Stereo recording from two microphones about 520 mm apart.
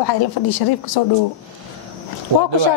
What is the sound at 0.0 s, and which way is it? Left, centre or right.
A woman's voice, left.